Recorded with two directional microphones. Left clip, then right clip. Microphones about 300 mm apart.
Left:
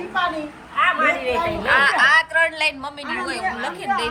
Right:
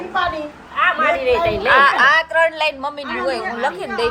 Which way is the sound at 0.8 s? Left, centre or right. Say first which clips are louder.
Right 2 dB; right.